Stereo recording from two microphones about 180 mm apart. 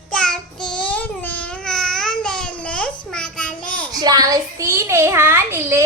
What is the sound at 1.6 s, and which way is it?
Babbling, 5° left (ahead or behind).